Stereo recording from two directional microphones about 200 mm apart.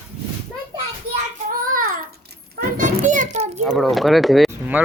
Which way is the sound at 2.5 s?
45° right (ahead or behind).